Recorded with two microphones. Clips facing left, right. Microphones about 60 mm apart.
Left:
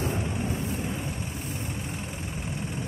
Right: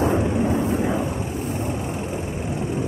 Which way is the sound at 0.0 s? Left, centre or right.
Right.